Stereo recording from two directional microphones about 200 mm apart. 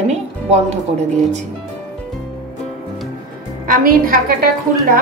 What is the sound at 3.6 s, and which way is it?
Speech, 45° right (ahead or behind).